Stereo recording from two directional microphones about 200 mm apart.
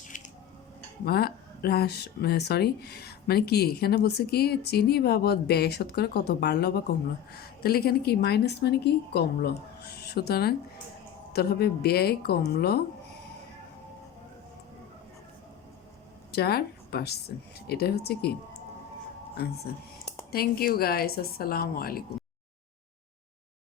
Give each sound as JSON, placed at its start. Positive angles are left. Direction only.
{"t": 0.1, "sound": "squish", "side_deg": 40}
{"t": 1.0, "sound": "speech", "side_deg": 50}
{"t": 16.3, "sound": "speech", "side_deg": 50}
{"t": 19.4, "sound": "speech", "side_deg": 50}